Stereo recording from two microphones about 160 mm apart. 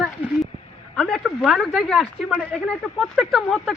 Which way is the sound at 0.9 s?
5° left (ahead or behind).